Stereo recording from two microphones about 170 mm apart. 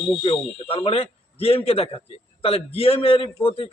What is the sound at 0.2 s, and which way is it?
Speech, 35° left (ahead or behind).